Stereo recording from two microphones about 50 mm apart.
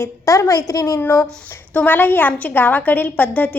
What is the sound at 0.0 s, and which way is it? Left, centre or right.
Speech, left.